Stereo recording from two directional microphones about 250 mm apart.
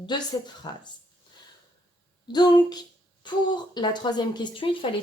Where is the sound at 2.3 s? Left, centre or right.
Centre.